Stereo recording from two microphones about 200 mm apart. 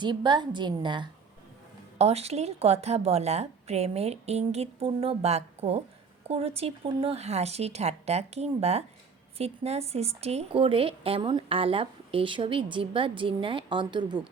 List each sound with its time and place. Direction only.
0.0 s a woman's voice: 20° right (ahead or behind)